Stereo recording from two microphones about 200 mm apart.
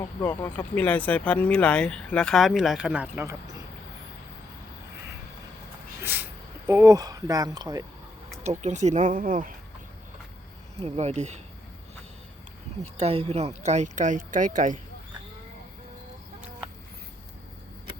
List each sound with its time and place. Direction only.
0.2 s speech: 10° left (ahead or behind); by 3.3 s 10° right (ahead or behind)
6.0 s a sound: 10° right (ahead or behind)
6.7 s speech: 15° right (ahead or behind)
8.4 s speech: 35° right (ahead or behind)
10.8 s speech: 30° right (ahead or behind)
12.8 s speech: 30° right (ahead or behind)